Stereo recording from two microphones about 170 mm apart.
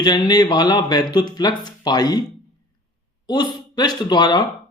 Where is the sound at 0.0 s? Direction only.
25° left (ahead or behind).